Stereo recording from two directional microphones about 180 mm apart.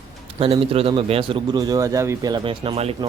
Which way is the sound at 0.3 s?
30° right (ahead or behind).